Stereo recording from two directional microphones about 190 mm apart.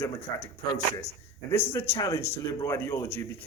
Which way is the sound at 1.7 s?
10° left (ahead or behind).